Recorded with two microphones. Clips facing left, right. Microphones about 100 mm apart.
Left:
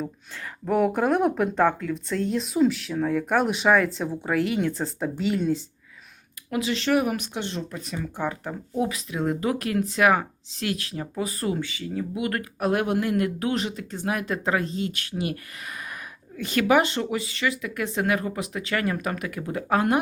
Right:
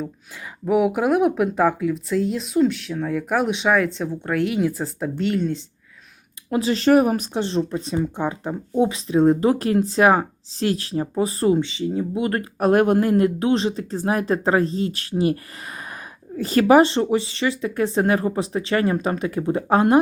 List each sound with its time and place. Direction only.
0.6 s speech: 5° right (ahead or behind)
6.5 s speech: 35° right (ahead or behind)